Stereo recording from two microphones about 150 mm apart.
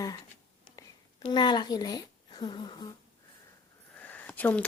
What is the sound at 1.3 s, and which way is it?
Speech, 30° left (ahead or behind).